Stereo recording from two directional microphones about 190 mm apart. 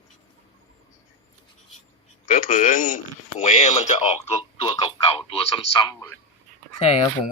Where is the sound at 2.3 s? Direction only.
45° left (ahead or behind).